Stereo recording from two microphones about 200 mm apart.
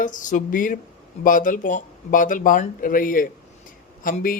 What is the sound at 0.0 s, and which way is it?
Speech, 40° left (ahead or behind).